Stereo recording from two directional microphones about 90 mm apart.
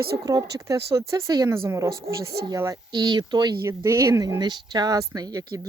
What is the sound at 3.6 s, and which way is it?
Speech, 30° right (ahead or behind).